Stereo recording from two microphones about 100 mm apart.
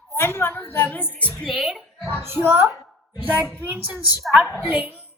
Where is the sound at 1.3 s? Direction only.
5° left (ahead or behind).